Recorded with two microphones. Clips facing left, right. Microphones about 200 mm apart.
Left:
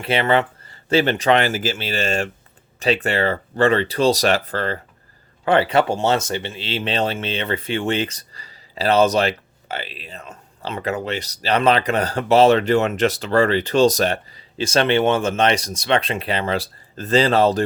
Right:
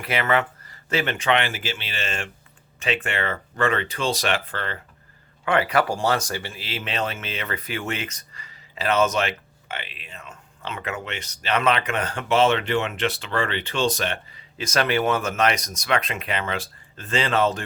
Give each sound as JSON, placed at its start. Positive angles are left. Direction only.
{"t": 0.0, "sound": "speech", "side_deg": 30}